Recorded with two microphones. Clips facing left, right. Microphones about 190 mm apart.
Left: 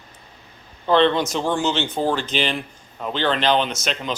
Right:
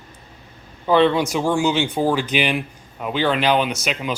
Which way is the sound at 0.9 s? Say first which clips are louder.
Right 1 dB; 10° right (ahead or behind).